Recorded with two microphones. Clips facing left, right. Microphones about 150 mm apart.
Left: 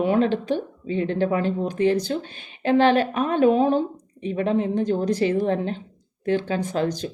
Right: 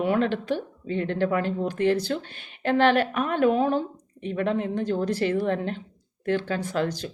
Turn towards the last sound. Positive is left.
turn(degrees=20)  # may be behind; listen again after turning